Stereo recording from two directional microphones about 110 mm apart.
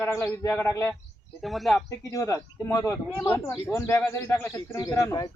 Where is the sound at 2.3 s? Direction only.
25° left (ahead or behind).